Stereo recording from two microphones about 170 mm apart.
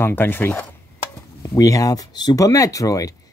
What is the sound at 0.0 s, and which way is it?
Speech, 10° left (ahead or behind).